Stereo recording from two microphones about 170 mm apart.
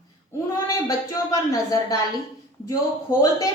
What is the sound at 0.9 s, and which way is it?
A woman's voice, 20° left (ahead or behind).